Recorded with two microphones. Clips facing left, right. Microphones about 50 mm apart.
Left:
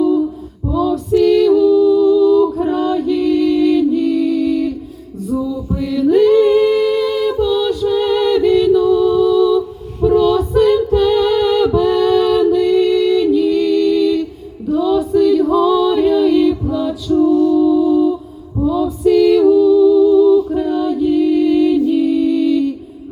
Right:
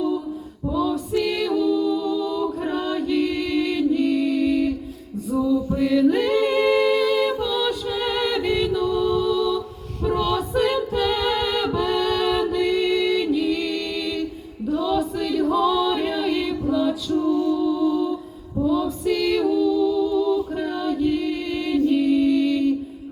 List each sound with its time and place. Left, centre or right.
0.7 s a capella: centre
5.3 s singing: centre
9.6 s a capella: centre
13.2 s music: centre
14.7 s choir: centre
17.2 s music: centre
17.6 s music: centre
19.5 s a capella: centre
20.0 s music: centre